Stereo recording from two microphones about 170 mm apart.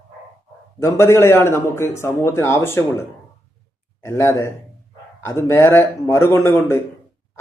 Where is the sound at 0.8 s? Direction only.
15° left (ahead or behind).